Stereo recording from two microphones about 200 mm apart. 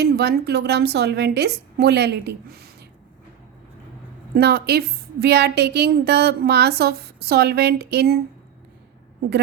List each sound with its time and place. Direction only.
0.0 s a woman's voice: 55° right (ahead or behind)
4.4 s a woman's voice: 55° right (ahead or behind)